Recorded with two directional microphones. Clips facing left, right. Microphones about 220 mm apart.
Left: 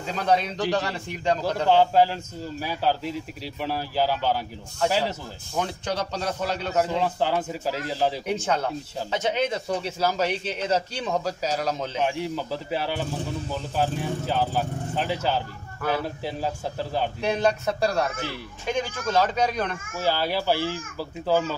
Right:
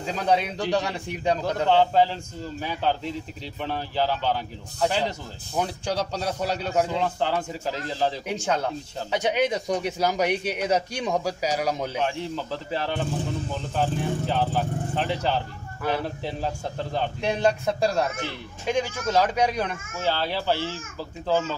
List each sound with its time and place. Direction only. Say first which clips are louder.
0.0 s a man's voice: even; 10° right (ahead or behind)
1.4 s a child's voice: left 1 dB; 5° left (ahead or behind)
5.6 s a man's voice: right 1 dB; 10° right (ahead or behind)
6.8 s a child's voice: left 1 dB; 10° left (ahead or behind)
8.3 s a man's voice: left 1 dB; 10° right (ahead or behind)
12.0 s a child's voice: left 1 dB; 10° left (ahead or behind)
17.4 s a man's voice: right 2 dB; 10° right (ahead or behind)
20.0 s a child's voice: left 2 dB; 10° left (ahead or behind)